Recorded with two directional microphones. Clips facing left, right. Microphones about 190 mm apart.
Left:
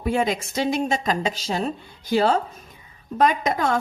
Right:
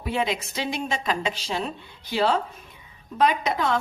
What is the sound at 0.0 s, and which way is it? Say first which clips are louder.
A woman's voice: left 4 dB; 45° left (ahead or behind).